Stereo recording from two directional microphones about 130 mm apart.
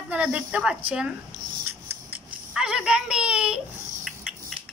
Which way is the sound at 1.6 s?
10° right (ahead or behind).